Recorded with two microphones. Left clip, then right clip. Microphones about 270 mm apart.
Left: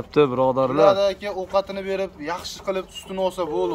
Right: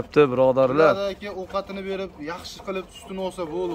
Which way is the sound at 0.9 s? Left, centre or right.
Centre.